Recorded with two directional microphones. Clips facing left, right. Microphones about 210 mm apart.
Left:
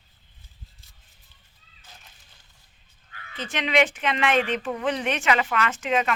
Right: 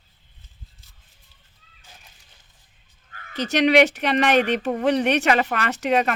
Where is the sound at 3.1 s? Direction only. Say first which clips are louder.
Right 9 dB; 40° right (ahead or behind).